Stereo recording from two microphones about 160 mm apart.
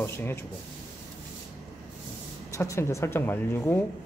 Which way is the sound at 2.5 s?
20° left (ahead or behind).